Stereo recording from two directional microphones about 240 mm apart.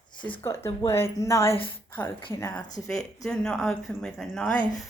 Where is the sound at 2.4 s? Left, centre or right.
Centre.